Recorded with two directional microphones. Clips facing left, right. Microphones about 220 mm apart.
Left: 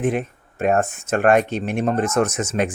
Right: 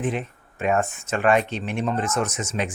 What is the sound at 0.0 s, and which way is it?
Speech, 50° left (ahead or behind).